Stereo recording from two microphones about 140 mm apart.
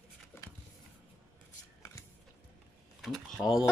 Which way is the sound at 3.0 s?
5° left (ahead or behind).